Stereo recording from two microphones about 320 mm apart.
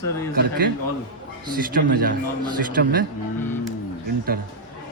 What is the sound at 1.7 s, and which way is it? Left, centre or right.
Speech, right.